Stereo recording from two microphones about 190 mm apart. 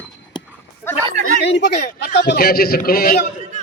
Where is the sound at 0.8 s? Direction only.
10° left (ahead or behind).